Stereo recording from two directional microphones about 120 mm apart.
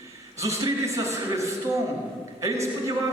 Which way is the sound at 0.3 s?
25° right (ahead or behind).